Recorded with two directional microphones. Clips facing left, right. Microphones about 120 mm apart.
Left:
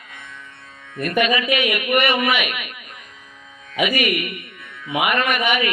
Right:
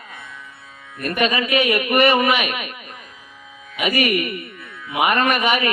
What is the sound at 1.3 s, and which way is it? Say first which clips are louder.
A man's voice: right 2 dB; 35° right (ahead or behind).